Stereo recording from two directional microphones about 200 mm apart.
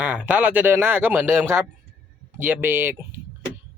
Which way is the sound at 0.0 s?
10° right (ahead or behind).